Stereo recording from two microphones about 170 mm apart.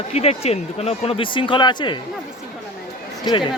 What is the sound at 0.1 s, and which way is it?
Speech, 35° left (ahead or behind).